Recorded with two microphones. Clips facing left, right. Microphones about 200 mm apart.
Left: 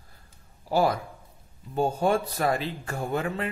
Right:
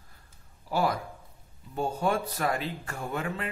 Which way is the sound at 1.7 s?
30° left (ahead or behind).